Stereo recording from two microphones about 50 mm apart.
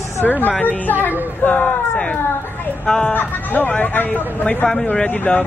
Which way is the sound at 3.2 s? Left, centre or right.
Left.